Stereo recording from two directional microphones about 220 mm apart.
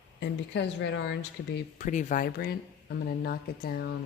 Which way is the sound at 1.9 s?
35° left (ahead or behind).